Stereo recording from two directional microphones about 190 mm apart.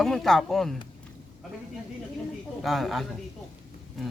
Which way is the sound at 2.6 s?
Centre (ahead or behind).